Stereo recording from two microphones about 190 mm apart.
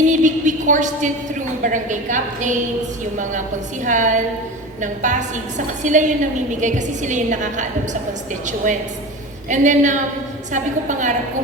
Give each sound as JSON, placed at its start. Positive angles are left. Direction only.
{"t": 0.0, "sound": "a woman's voice", "side_deg": -40}
{"t": 3.8, "sound": "a woman's voice", "side_deg": -40}